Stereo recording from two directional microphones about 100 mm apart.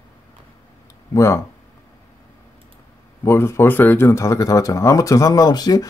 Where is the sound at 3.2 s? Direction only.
25° left (ahead or behind).